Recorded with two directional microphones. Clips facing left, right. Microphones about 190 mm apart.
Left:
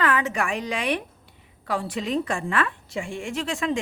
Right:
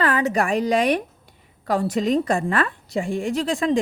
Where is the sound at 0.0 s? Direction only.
35° right (ahead or behind).